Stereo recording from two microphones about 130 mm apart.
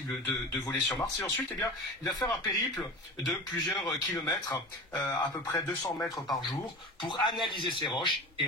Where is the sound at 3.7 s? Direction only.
30° left (ahead or behind).